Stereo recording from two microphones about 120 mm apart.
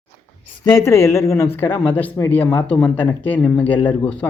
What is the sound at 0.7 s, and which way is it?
Speech, 25° left (ahead or behind).